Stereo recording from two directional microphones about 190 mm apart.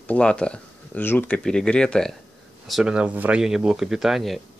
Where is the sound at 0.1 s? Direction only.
5° left (ahead or behind).